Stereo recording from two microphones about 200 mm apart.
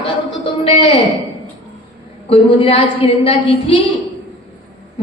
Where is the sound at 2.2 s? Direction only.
30° left (ahead or behind).